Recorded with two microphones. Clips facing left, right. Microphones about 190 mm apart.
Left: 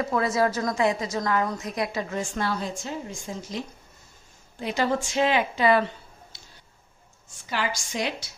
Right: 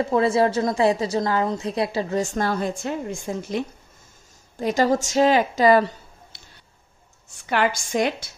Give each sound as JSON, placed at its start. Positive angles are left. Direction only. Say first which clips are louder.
{"t": 0.0, "sound": "a woman's voice", "louder": "right 5 dB", "side_deg": -30}
{"t": 4.6, "sound": "a woman's voice", "louder": "right 5 dB", "side_deg": -45}
{"t": 6.3, "sound": "a sound", "louder": "right 1 dB", "side_deg": -60}
{"t": 7.4, "sound": "a woman's voice", "louder": "right 7 dB", "side_deg": -55}